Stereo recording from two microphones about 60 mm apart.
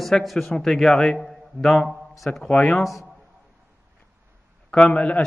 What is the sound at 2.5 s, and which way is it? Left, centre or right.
Speech, left.